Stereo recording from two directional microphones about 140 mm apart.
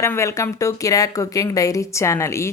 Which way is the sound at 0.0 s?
20° left (ahead or behind).